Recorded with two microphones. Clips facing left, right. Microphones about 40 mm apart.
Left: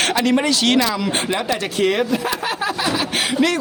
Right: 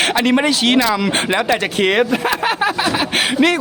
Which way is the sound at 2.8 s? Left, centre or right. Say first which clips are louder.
Right 3 dB; right.